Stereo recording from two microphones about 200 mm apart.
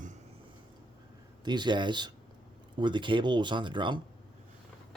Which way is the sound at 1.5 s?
20° right (ahead or behind).